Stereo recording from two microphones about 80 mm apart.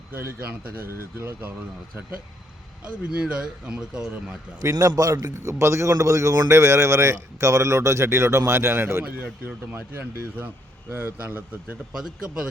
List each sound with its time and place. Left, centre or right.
3.0 s speech: centre
4.6 s a man's voice: right
5.5 s speech: right
9.7 s speech: right
11.9 s speech: centre